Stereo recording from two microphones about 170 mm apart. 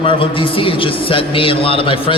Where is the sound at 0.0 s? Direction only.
30° left (ahead or behind).